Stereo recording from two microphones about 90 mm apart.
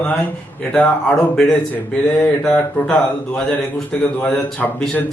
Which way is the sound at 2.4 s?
5° left (ahead or behind).